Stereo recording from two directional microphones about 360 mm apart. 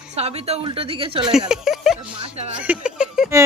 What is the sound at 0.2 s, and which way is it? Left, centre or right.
Speech, centre.